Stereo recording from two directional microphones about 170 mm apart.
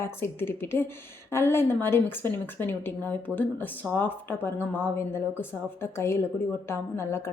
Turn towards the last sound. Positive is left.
turn(degrees=15)  # may be behind; listen again after turning